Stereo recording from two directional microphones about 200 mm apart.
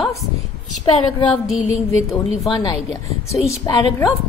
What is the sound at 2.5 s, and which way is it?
A woman's voice, 20° left (ahead or behind).